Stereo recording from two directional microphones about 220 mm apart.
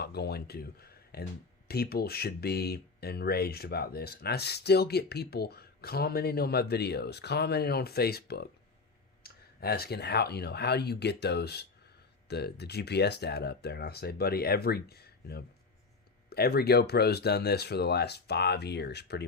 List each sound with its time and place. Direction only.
0.0 s speech: 45° left (ahead or behind)